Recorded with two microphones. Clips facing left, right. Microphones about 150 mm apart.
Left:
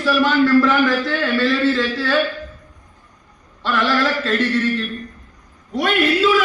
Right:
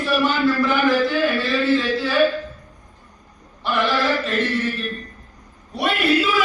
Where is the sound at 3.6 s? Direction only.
90° left.